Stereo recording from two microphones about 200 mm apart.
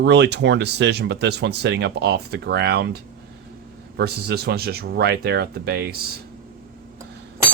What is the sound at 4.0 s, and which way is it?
Speech, 55° right (ahead or behind).